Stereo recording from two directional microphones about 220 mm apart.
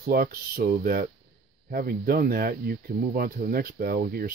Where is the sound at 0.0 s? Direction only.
45° right (ahead or behind).